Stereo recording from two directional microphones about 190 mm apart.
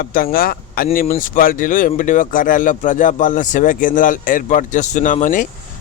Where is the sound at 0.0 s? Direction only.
50° left (ahead or behind).